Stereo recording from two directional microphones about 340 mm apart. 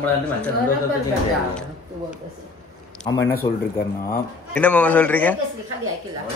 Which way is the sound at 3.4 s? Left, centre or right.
Centre.